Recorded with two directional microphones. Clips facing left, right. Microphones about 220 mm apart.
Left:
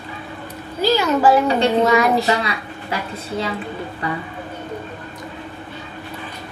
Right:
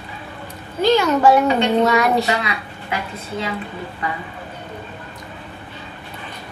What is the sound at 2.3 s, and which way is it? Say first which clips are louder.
Speech: left 2 dB; 35° left (ahead or behind).